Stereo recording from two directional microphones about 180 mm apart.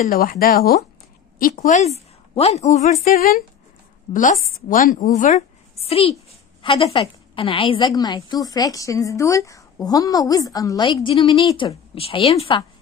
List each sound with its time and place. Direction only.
0.0 s speech: 45° left (ahead or behind)
1.4 s a woman's voice: 45° left (ahead or behind)
3.0 s a woman's voice: 55° left (ahead or behind)
5.9 s a woman's voice: 30° left (ahead or behind)